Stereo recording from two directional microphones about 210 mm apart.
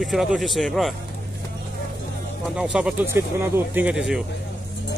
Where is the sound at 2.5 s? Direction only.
5° right (ahead or behind).